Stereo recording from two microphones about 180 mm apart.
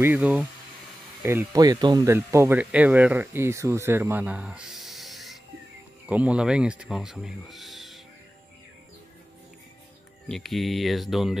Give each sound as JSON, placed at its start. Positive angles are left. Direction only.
{"t": 0.0, "sound": "speech", "side_deg": -10}
{"t": 10.2, "sound": "speech", "side_deg": 0}